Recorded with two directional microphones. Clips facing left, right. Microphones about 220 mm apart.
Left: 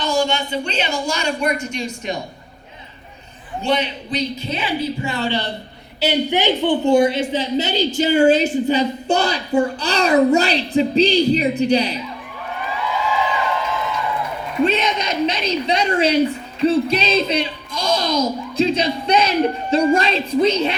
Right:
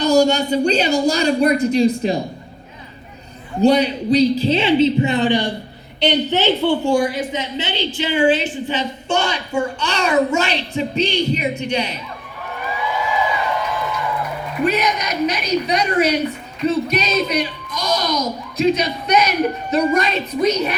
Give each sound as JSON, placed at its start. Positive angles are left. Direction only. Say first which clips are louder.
{"t": 0.0, "sound": "a woman's voice", "louder": "right 6 dB", "side_deg": -40}
{"t": 3.6, "sound": "a woman's voice", "louder": "right 7 dB", "side_deg": -40}
{"t": 6.0, "sound": "a woman's voice", "louder": "right 1 dB", "side_deg": 10}
{"t": 14.6, "sound": "a woman's voice", "louder": "left 1 dB", "side_deg": 25}